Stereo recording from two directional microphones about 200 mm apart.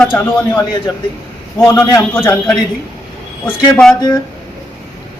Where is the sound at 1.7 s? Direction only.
15° left (ahead or behind).